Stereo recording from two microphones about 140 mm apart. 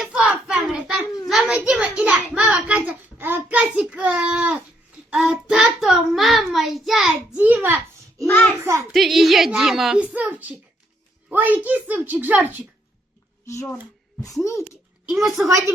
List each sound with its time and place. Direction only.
0.0 s hands: 5° right (ahead or behind)
1.3 s a sound: 5° right (ahead or behind)
5.1 s child singing: 5° right (ahead or behind); by 8.9 s 20° right (ahead or behind)
8.9 s a child's voice: centre (ahead or behind)
13.4 s a child's voice: 20° left (ahead or behind)
15.1 s a child's voice: centre (ahead or behind)
15.4 s a woman's voice: 20° right (ahead or behind)